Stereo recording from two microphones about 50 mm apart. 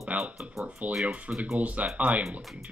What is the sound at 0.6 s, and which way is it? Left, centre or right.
A man's voice, right.